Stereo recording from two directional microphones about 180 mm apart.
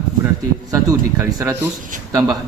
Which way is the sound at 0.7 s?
15° right (ahead or behind).